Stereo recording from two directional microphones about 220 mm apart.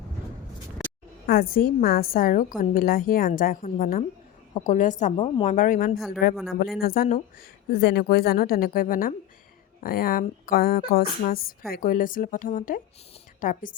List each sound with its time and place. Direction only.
1.3 s speech: 40° left (ahead or behind)
6.3 s speech: centre (ahead or behind)
6.8 s speech: 40° left (ahead or behind)